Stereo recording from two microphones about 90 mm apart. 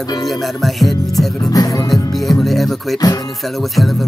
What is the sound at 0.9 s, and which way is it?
Music, 40° left (ahead or behind).